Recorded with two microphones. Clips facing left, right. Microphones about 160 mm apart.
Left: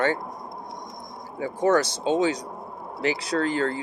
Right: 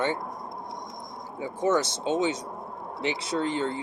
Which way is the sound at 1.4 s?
25° right (ahead or behind).